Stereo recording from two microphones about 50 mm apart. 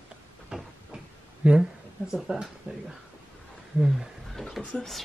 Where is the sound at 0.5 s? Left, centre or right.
Centre.